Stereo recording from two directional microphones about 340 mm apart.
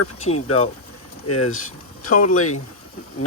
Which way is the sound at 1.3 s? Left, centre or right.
Left.